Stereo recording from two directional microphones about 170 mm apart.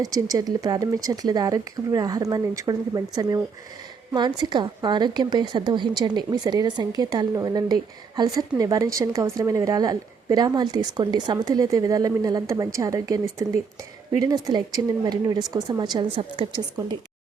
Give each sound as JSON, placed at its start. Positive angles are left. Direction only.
{"t": 0.0, "sound": "a woman's voice", "side_deg": -20}